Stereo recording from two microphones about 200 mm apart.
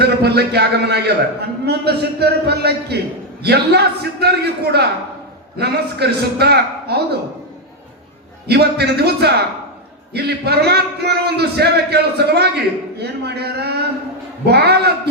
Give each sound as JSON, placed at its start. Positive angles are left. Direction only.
{"t": 0.0, "sound": "a man's voice", "side_deg": -55}
{"t": 8.4, "sound": "a man's voice", "side_deg": -55}